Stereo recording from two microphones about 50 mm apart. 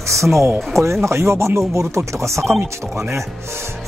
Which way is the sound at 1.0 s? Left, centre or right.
Right.